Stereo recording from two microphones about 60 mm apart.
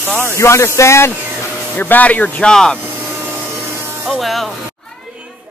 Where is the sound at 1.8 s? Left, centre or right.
Left.